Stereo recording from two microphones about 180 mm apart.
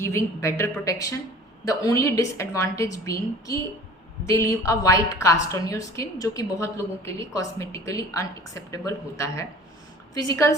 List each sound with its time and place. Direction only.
0.0 s a woman's voice: 15° left (ahead or behind)